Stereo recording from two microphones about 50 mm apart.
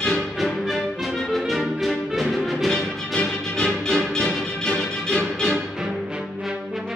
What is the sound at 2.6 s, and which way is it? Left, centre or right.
Music, centre.